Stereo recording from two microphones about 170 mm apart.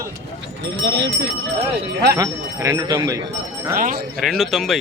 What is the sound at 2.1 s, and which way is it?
Speech, 20° right (ahead or behind).